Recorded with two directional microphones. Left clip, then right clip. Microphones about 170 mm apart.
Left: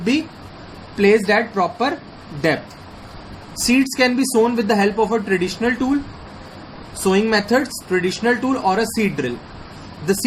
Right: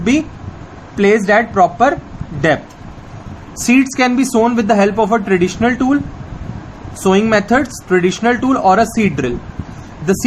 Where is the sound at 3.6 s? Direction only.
55° right (ahead or behind).